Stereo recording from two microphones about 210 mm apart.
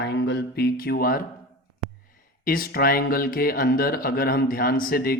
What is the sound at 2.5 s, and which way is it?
Speech, 45° left (ahead or behind).